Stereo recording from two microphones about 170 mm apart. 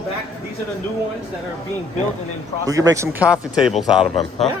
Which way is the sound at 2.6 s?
20° right (ahead or behind).